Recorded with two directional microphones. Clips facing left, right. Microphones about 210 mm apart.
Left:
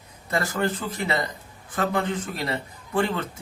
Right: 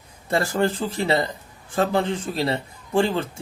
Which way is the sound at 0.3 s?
30° right (ahead or behind).